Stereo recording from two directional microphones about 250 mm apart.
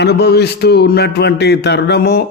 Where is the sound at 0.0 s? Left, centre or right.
Left.